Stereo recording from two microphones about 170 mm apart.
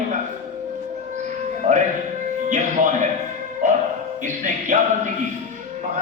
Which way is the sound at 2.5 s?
50° right (ahead or behind).